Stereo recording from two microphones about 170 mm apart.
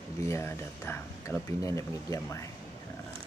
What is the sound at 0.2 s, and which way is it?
Speech, 15° left (ahead or behind).